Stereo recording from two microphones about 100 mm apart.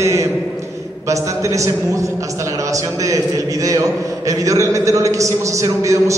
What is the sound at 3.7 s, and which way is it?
A man's voice, 35° right (ahead or behind).